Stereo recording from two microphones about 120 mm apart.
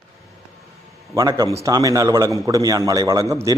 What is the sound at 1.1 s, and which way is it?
A man's voice, 25° right (ahead or behind).